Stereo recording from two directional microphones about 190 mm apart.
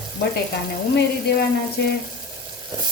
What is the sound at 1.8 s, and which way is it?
Sizzle, 60° left (ahead or behind).